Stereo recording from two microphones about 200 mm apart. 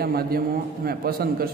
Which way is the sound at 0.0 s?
50° right (ahead or behind).